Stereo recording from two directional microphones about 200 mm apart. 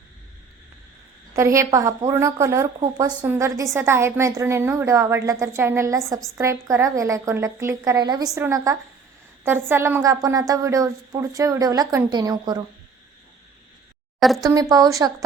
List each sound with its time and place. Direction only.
1.3 s a woman's voice: 15° right (ahead or behind)
14.2 s a woman's voice: centre (ahead or behind)
14.4 s a woman's voice: 20° right (ahead or behind)